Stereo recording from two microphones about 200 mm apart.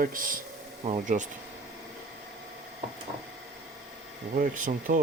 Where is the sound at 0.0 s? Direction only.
45° right (ahead or behind).